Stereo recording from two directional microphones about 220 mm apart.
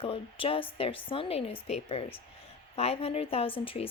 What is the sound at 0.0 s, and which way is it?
Speech, 25° left (ahead or behind).